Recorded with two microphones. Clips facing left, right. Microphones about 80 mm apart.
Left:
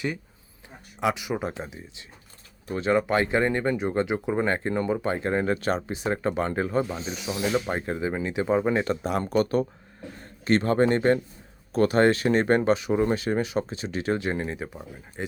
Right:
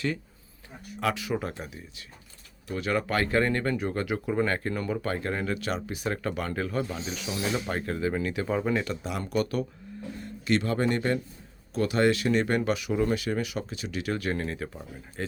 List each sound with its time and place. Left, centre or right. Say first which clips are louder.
0.9 s speech: left 2 dB; centre